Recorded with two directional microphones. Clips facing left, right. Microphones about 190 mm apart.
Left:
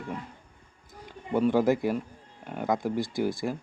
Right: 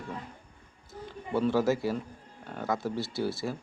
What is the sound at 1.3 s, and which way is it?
Speech, 15° left (ahead or behind).